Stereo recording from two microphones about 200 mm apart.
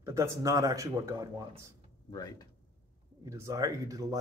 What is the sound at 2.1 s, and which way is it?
Speech, 20° left (ahead or behind).